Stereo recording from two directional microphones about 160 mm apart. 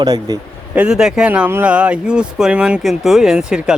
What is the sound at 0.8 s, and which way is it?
Speech, 5° right (ahead or behind).